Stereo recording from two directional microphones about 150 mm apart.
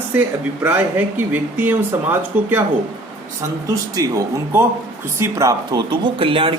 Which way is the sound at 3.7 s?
20° right (ahead or behind).